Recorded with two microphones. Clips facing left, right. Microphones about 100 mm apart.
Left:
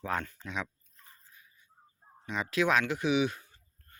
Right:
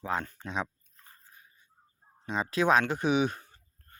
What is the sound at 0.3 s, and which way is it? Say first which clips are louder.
Speech: right 3 dB; 35° right (ahead or behind).